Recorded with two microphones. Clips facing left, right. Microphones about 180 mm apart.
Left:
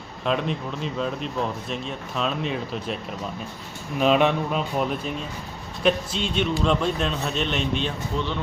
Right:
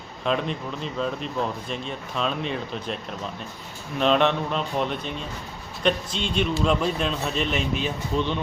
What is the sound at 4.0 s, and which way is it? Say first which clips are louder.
Speech: left 1 dB; 5° left (ahead or behind).